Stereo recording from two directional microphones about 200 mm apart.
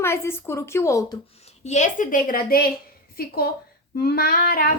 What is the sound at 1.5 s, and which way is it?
A woman's voice, 35° left (ahead or behind).